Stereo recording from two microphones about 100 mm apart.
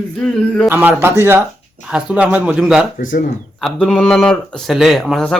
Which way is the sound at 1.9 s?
15° right (ahead or behind).